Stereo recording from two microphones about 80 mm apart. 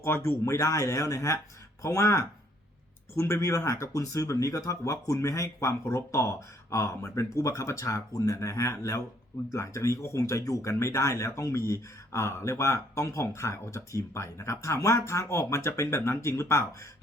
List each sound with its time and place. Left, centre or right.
0.0 s speech: left